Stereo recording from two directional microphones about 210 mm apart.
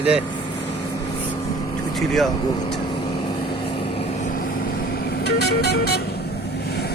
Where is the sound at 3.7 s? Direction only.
25° left (ahead or behind).